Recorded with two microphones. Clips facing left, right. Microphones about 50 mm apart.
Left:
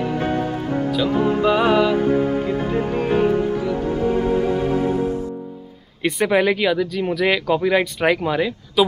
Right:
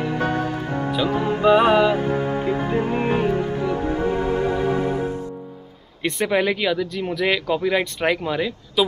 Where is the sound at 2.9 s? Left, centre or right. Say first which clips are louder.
Left 1 dB; right.